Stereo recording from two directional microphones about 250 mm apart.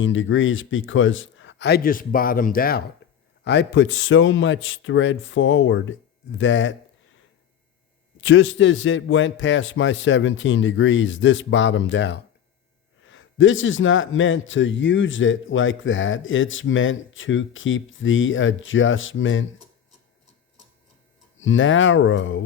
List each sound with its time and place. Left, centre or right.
0.0 s a man's voice: left
8.2 s a man's voice: left
21.3 s a man's voice: left